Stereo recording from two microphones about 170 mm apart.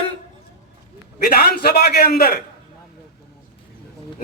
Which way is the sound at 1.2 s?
60° left (ahead or behind).